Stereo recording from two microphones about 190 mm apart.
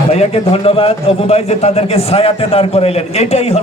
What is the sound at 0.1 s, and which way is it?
A man's voice, 30° left (ahead or behind).